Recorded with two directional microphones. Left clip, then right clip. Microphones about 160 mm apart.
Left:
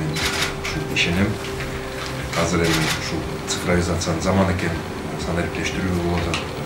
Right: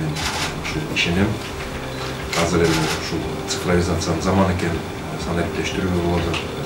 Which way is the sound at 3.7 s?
Centre (ahead or behind).